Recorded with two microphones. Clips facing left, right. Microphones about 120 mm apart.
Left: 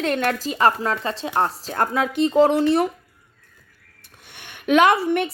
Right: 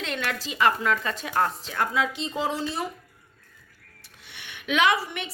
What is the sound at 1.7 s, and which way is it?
Speech, 50° left (ahead or behind).